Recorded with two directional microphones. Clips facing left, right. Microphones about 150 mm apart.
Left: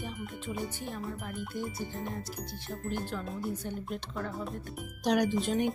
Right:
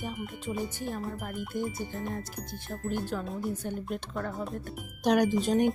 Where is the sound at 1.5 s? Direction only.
50° right (ahead or behind).